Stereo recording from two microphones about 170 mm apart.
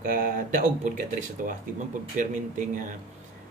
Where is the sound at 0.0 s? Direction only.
55° right (ahead or behind).